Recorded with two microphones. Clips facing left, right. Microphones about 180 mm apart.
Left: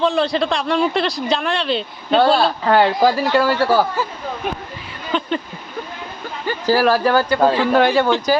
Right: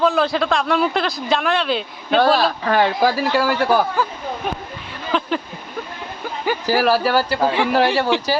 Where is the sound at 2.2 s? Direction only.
30° left (ahead or behind).